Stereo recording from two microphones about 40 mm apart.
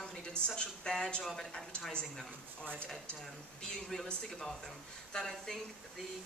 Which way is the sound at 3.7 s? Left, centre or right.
Centre.